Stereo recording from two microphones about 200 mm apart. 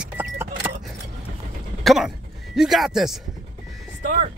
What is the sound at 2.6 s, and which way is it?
Speech, centre (ahead or behind).